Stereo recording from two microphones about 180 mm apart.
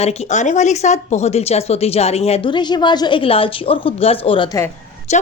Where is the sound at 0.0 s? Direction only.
40° left (ahead or behind).